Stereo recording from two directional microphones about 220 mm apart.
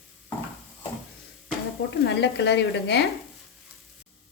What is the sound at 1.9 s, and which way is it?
A woman's voice, 50° left (ahead or behind).